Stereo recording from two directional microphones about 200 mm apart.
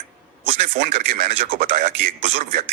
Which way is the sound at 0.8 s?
50° right (ahead or behind).